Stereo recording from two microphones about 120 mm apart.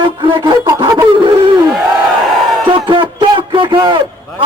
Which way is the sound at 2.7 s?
45° right (ahead or behind).